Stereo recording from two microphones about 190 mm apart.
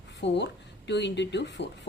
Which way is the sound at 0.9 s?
65° left (ahead or behind).